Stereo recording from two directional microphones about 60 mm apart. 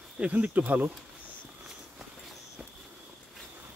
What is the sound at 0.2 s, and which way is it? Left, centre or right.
Speech, right.